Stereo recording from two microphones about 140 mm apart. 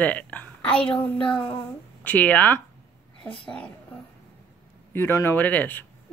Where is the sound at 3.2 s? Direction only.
40° left (ahead or behind).